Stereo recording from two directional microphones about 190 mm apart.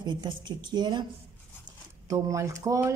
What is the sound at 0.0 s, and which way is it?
A woman's voice, 25° right (ahead or behind).